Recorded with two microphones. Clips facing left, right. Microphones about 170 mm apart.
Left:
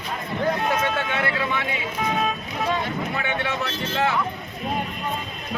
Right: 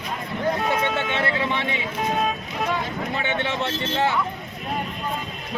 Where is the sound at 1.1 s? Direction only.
25° right (ahead or behind).